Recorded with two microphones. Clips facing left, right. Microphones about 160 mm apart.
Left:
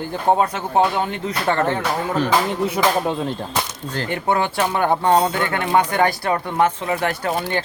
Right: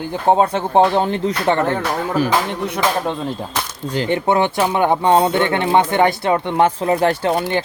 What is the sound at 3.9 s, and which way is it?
Speech, 20° right (ahead or behind).